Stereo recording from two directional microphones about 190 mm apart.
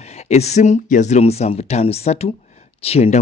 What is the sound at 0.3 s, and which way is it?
Speech, 35° left (ahead or behind).